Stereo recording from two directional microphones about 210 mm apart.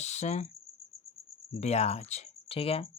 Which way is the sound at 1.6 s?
30° left (ahead or behind).